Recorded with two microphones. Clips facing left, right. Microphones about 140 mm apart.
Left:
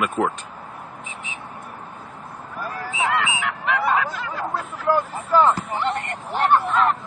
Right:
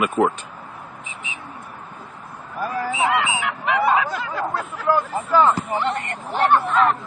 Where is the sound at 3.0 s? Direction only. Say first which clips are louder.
Even; 10° right (ahead or behind).